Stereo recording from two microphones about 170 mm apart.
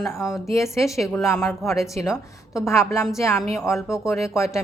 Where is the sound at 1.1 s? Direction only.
20° left (ahead or behind).